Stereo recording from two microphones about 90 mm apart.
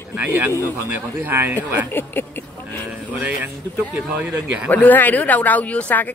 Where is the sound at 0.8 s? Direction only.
25° right (ahead or behind).